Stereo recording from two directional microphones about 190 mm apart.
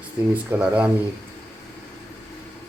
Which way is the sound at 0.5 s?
5° right (ahead or behind).